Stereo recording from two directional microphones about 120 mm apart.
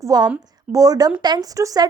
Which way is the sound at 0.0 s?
30° right (ahead or behind).